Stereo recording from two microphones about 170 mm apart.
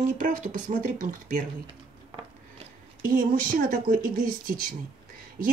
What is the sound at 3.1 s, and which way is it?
Speech, 50° right (ahead or behind).